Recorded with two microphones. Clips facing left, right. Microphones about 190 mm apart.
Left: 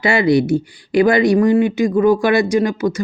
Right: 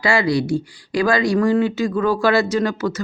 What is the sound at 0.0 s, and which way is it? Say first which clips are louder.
Speech: left 4 dB; 25° left (ahead or behind).